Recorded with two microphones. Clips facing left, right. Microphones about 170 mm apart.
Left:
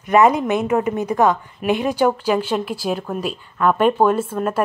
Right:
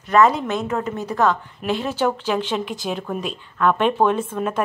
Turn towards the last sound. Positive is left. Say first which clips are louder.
# left 2 dB
turn(degrees=5)  # may be behind; listen again after turning